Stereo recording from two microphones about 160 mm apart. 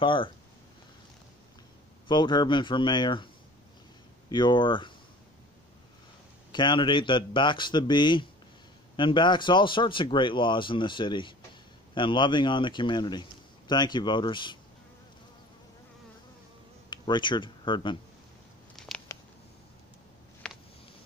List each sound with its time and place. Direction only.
0.0 s speech: 30° left (ahead or behind)
2.0 s a man's voice: 30° left (ahead or behind)
4.3 s a man's voice: 30° left (ahead or behind)
6.5 s a man's voice: 30° left (ahead or behind)
16.9 s speech: 30° left (ahead or behind)
18.8 s a sound: centre (ahead or behind)
20.4 s a sound: 5° left (ahead or behind)